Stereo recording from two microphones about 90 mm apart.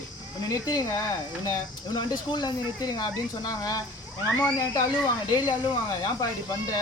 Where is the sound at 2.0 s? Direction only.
55° left (ahead or behind).